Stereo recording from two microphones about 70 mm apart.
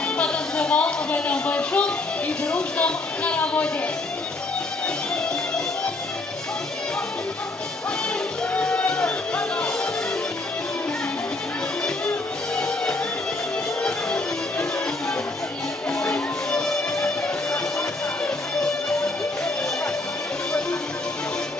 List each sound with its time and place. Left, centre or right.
0.2 s a sound: centre
8.5 s music: centre
12.5 s music: centre